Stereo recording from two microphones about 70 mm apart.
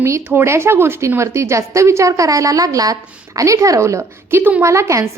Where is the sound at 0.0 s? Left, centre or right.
Right.